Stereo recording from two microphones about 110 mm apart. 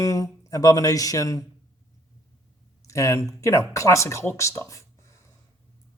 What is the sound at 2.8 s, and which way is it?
Speech, 30° left (ahead or behind).